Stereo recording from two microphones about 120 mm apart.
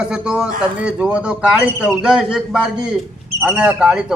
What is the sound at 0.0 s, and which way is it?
A man's voice, 5° right (ahead or behind).